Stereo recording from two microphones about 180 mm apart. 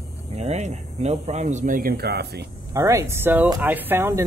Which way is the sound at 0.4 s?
40° right (ahead or behind).